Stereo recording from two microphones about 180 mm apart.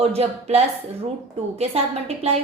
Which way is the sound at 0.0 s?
35° right (ahead or behind).